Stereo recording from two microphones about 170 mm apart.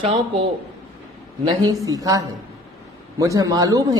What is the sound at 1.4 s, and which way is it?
A man's voice, 20° right (ahead or behind).